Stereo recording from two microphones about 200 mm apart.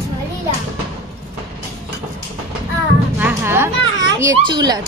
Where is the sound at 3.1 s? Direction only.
10° right (ahead or behind).